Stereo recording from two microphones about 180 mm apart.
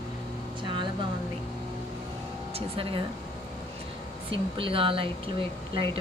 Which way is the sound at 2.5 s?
30° right (ahead or behind).